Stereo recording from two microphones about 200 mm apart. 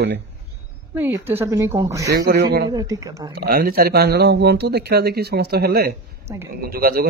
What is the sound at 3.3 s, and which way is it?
A man's voice, 50° right (ahead or behind).